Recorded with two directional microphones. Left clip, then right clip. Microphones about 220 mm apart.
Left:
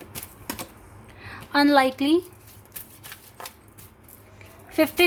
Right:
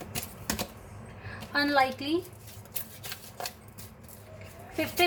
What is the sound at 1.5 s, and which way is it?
Speech, 50° left (ahead or behind).